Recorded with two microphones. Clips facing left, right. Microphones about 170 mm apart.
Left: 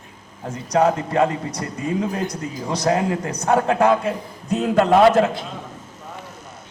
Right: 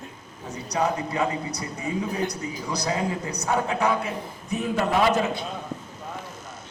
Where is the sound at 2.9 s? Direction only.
60° left (ahead or behind); by 5.4 s 85° left.